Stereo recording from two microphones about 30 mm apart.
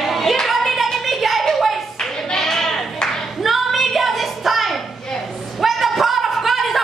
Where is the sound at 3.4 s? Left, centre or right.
Centre.